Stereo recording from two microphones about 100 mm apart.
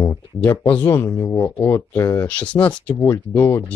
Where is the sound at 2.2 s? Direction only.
15° left (ahead or behind).